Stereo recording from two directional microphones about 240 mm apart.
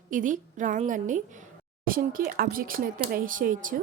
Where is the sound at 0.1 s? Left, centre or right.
Right.